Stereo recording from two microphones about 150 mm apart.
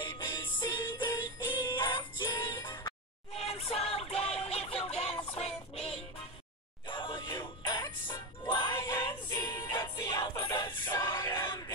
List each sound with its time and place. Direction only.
0.0 s music: 30° left (ahead or behind)
3.3 s a sound: 45° left (ahead or behind)
3.9 s music: 40° left (ahead or behind)
6.9 s music: 30° left (ahead or behind)